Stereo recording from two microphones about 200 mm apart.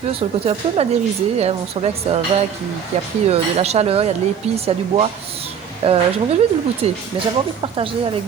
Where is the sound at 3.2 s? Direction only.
30° right (ahead or behind).